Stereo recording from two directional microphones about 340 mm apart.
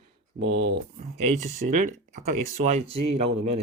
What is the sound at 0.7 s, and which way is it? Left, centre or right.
Speech, right.